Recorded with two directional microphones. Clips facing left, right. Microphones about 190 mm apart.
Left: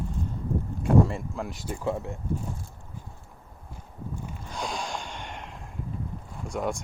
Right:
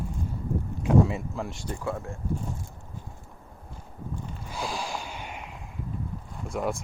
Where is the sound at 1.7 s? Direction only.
15° left (ahead or behind).